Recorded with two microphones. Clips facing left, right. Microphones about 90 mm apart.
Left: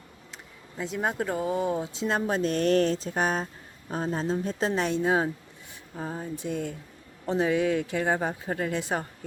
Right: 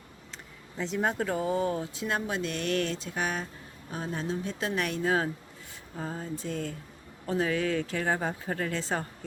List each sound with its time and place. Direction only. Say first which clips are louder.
0.8 s speech: even; 5° left (ahead or behind)